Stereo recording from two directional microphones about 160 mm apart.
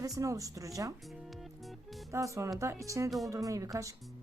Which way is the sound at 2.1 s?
20° right (ahead or behind).